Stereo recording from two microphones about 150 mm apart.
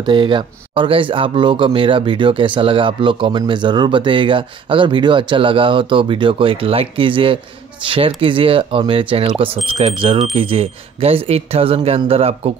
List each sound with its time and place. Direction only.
0.0 s speech: 35° right (ahead or behind)